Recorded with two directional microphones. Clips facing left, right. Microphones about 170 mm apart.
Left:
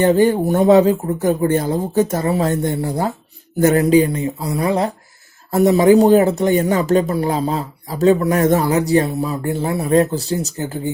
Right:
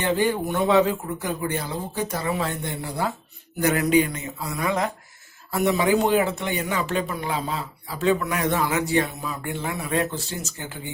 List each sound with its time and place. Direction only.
0.0 s speech: 45° left (ahead or behind)
3.8 s speech: 30° left (ahead or behind)